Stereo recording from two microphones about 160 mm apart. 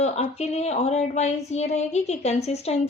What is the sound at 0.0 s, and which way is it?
Speech, 40° left (ahead or behind).